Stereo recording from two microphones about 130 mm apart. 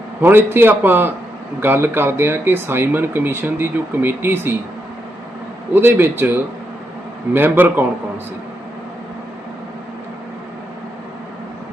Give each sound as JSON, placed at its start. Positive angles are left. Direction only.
{"t": 0.2, "sound": "speech", "side_deg": -15}
{"t": 5.7, "sound": "speech", "side_deg": -15}